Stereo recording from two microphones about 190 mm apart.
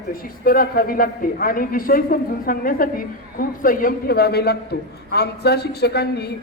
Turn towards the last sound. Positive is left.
turn(degrees=60)  # may be behind; listen again after turning